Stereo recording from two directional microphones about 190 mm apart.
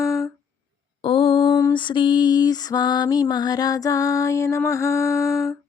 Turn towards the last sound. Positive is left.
turn(degrees=15)  # may be behind; listen again after turning